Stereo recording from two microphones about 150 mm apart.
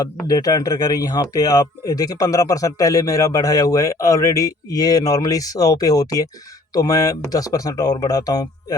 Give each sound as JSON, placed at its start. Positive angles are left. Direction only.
{"t": 0.3, "sound": "speech", "side_deg": 25}